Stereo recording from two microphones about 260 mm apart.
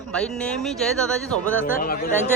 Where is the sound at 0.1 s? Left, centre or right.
Centre.